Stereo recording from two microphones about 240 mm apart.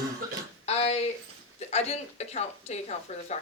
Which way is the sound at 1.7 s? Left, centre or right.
Left.